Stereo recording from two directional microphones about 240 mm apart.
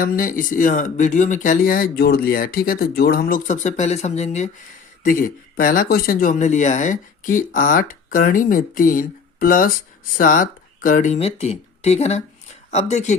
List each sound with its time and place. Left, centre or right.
0.0 s speech: left